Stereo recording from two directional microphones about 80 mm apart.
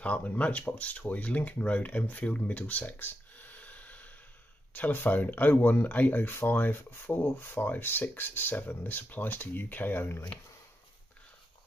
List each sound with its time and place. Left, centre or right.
0.0 s speech: centre